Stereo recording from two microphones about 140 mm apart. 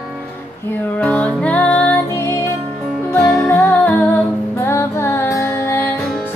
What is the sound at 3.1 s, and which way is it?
Music, centre (ahead or behind).